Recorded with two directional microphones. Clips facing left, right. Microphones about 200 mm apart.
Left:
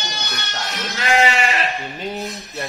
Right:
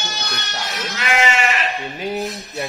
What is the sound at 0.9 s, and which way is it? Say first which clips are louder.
Sheep: left 2 dB; 35° left (ahead or behind).